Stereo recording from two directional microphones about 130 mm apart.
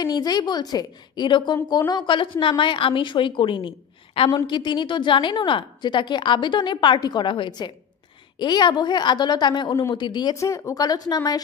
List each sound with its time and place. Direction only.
0.0 s a woman's voice: 30° left (ahead or behind)
10.3 s speech: 25° left (ahead or behind)